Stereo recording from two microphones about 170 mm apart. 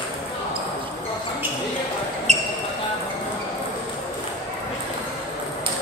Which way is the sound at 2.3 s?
40° right (ahead or behind).